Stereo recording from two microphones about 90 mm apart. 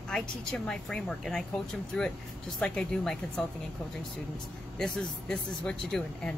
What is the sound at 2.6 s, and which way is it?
Speech, 5° left (ahead or behind).